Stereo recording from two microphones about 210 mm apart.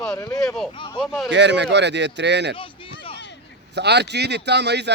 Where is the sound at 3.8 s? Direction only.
55° right (ahead or behind).